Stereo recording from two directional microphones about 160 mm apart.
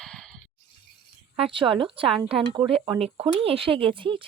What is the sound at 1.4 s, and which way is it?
Speech, 35° right (ahead or behind).